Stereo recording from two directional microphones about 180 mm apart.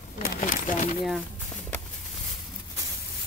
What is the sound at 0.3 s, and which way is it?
Speech, 45° left (ahead or behind).